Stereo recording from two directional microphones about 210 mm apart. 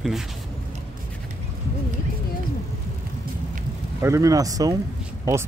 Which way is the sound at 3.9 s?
15° right (ahead or behind).